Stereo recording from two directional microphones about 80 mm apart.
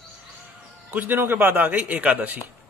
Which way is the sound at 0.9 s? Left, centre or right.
Right.